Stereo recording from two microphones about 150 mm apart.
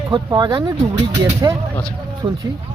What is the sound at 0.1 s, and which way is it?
Speech, 30° right (ahead or behind).